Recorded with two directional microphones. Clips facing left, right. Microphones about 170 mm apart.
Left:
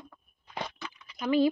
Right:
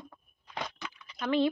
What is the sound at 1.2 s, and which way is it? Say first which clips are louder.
Speech: left 3 dB; 10° left (ahead or behind).